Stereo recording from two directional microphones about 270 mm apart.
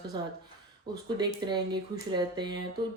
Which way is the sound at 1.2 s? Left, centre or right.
Centre.